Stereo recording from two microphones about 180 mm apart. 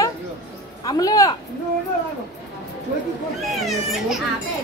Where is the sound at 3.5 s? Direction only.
Centre (ahead or behind).